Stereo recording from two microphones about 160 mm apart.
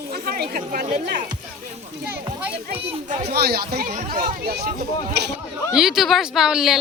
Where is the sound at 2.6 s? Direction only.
70° right (ahead or behind).